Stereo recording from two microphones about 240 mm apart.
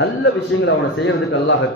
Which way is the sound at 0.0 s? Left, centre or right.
Left.